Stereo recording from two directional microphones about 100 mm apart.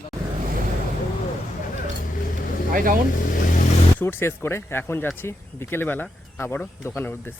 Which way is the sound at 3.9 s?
25° left (ahead or behind).